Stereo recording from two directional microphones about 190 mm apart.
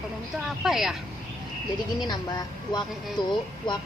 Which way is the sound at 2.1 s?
20° left (ahead or behind).